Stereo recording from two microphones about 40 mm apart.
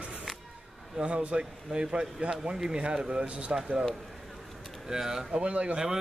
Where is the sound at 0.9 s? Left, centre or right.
Right.